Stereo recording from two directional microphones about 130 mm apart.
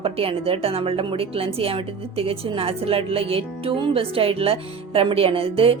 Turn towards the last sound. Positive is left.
turn(degrees=-45)  # may be behind; listen again after turning